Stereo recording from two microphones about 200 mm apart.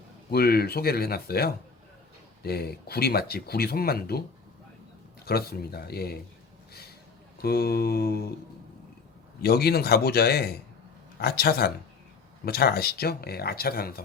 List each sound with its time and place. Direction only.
0.3 s speech: 50° left (ahead or behind)
5.2 s speech: 50° left (ahead or behind)
7.4 s speech: 50° left (ahead or behind)
9.4 s speech: 50° left (ahead or behind)